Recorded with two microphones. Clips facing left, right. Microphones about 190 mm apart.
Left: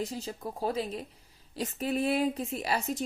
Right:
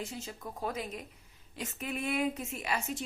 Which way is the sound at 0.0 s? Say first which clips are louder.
Left 6 dB; 35° left (ahead or behind).